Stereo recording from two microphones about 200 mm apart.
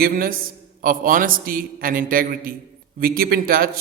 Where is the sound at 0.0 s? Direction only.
45° right (ahead or behind).